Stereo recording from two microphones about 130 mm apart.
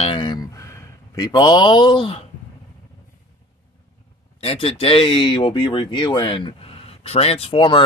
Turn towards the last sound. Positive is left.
turn(degrees=40)  # may be behind; listen again after turning